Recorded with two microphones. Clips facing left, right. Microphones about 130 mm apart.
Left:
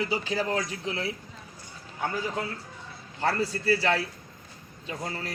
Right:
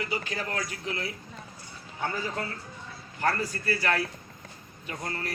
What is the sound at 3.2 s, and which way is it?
Speech, 25° left (ahead or behind).